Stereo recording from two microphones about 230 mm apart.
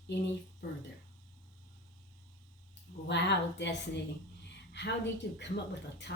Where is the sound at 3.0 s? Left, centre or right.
Left.